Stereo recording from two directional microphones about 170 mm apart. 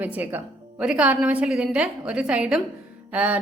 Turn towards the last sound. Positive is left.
turn(degrees=-10)  # may be behind; listen again after turning